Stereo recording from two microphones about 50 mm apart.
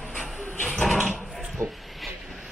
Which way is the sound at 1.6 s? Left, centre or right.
Right.